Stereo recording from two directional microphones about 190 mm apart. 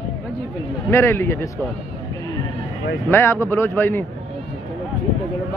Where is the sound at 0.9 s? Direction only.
15° left (ahead or behind).